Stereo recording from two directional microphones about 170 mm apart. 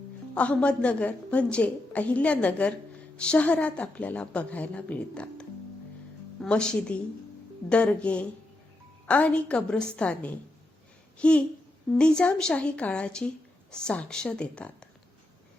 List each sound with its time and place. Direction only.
0.3 s a woman's voice: 5° left (ahead or behind)